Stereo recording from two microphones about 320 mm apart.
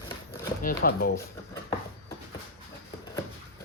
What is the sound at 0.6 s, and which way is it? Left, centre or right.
Speech, left.